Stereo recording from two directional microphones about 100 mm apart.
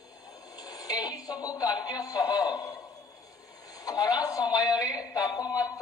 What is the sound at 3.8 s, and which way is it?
Speech, 40° left (ahead or behind).